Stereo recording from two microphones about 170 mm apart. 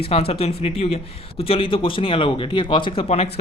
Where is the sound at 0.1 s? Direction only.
35° left (ahead or behind).